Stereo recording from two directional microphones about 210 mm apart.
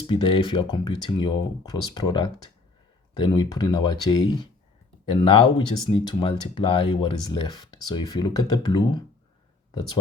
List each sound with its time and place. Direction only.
0.0 s speech: 25° left (ahead or behind)